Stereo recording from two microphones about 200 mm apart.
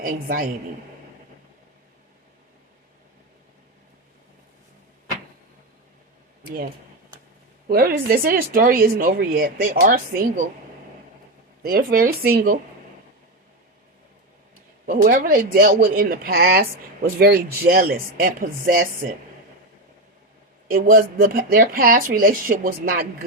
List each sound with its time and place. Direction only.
0.0 s speech: 45° right (ahead or behind)
6.4 s speech: 50° right (ahead or behind)
7.7 s speech: 50° right (ahead or behind)
11.6 s speech: 50° right (ahead or behind)
14.8 s speech: 45° right (ahead or behind)
20.7 s speech: 45° right (ahead or behind)